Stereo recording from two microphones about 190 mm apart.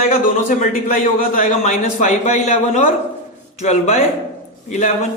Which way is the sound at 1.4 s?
40° left (ahead or behind).